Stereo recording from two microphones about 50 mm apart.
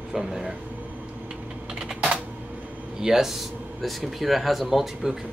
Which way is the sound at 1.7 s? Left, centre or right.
Centre.